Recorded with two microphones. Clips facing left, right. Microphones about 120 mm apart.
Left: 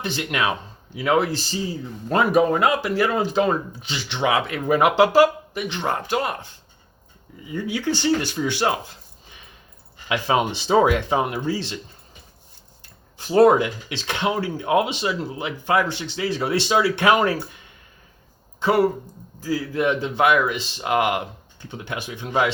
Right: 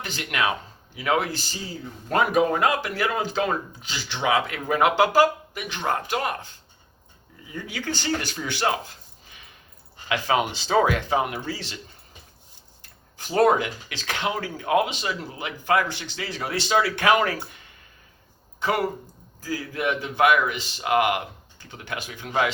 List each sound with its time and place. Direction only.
0.0 s speech: 25° left (ahead or behind)
7.7 s speech: 20° left (ahead or behind)
10.1 s speech: 25° left (ahead or behind)
13.3 s speech: 25° left (ahead or behind)
18.6 s speech: 25° left (ahead or behind)